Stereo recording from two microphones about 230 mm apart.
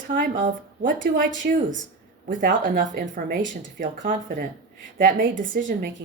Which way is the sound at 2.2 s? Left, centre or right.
Right.